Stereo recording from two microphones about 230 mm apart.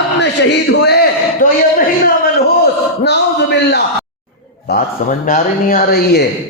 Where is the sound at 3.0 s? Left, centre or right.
Left.